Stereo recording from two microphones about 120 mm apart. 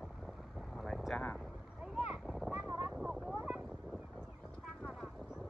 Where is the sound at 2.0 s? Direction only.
5° right (ahead or behind).